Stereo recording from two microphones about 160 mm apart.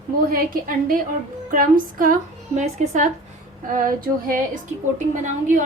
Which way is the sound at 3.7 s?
60° right (ahead or behind).